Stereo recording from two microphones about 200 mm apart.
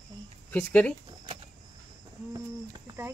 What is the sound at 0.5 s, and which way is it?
Speech, 10° left (ahead or behind).